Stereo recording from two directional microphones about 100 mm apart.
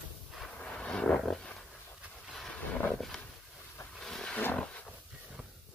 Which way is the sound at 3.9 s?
5° left (ahead or behind).